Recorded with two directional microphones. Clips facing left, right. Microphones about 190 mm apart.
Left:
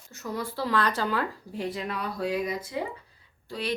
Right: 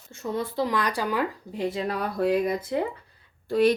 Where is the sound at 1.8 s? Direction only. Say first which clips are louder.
Right 5 dB; 40° right (ahead or behind).